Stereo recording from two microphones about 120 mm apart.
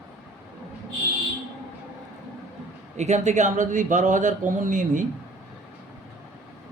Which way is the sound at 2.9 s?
75° right (ahead or behind).